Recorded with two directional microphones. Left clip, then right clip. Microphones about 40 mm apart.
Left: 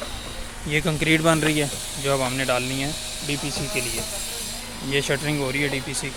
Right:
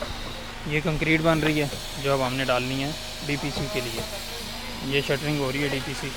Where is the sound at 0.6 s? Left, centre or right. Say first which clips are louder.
Left 3 dB; left.